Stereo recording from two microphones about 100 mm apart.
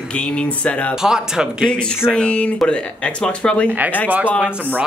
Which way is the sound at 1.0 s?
5° right (ahead or behind).